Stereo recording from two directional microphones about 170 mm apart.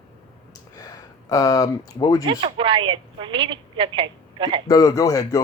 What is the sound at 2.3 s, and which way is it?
A woman's voice, 30° right (ahead or behind).